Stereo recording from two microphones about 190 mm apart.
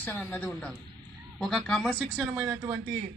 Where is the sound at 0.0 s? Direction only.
10° left (ahead or behind).